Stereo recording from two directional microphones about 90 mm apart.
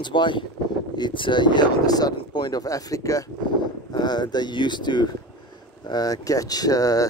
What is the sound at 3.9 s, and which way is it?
Speech, 50° left (ahead or behind).